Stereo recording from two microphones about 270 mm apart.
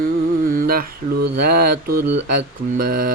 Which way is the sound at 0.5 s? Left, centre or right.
Right.